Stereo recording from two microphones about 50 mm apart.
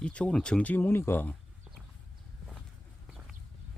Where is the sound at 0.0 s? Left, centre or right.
Left.